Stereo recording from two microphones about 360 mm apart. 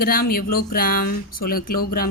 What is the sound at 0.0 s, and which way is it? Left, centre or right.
Speech, left.